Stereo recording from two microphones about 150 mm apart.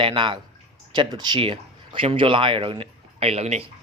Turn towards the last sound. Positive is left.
turn(degrees=-45)  # may be behind; listen again after turning